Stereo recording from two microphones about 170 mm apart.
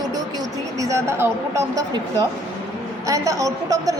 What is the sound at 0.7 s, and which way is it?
A woman's voice, 20° right (ahead or behind).